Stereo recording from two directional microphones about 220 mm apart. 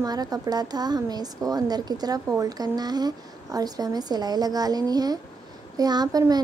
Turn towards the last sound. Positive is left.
turn(degrees=-15)  # may be behind; listen again after turning